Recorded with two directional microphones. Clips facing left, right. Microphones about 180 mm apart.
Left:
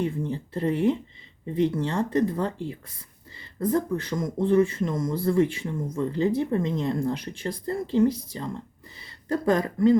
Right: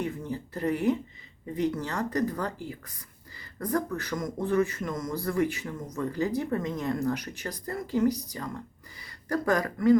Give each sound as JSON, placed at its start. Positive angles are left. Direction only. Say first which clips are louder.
{"t": 0.0, "sound": "speech", "louder": "left 4 dB", "side_deg": 25}